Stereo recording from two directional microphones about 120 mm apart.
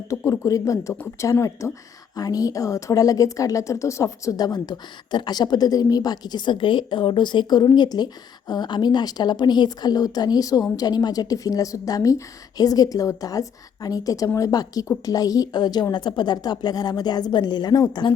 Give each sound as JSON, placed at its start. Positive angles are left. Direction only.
{"t": 0.1, "sound": "a woman's voice", "side_deg": 30}